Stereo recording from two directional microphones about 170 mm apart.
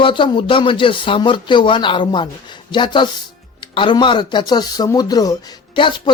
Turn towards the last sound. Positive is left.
turn(degrees=30)  # may be behind; listen again after turning